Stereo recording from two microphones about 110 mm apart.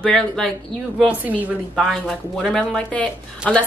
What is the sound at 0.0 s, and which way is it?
Speech, 5° left (ahead or behind).